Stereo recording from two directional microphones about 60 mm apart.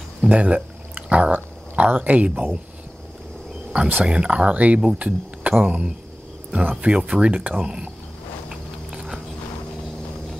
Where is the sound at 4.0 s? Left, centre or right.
Centre.